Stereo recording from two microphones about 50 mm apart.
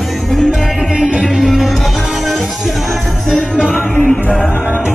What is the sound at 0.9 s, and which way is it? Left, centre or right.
Music, centre.